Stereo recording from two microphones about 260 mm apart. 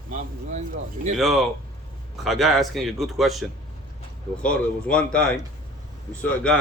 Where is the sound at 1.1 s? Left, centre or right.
Centre.